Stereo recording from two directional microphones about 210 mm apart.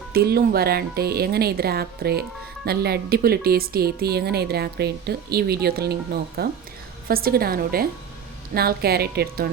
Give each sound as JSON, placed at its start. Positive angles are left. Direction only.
{"t": 0.1, "sound": "speech", "side_deg": -45}